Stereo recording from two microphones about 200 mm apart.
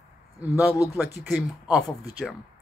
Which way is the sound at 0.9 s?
10° right (ahead or behind).